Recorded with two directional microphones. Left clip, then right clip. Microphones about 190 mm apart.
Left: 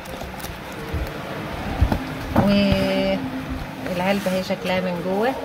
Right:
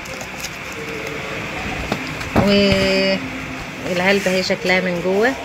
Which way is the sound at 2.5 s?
35° right (ahead or behind).